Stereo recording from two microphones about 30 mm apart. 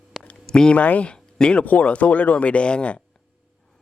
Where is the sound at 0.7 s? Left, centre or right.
Left.